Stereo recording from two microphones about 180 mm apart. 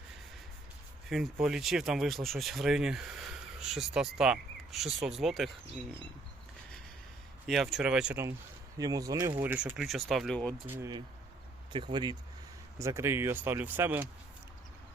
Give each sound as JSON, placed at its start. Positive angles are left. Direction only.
{"t": 1.1, "sound": "speech", "side_deg": 0}
{"t": 7.4, "sound": "speech", "side_deg": 0}
{"t": 10.7, "sound": "speech", "side_deg": -15}
{"t": 11.7, "sound": "speech", "side_deg": -25}